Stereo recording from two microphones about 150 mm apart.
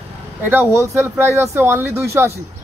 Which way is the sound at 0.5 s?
15° right (ahead or behind).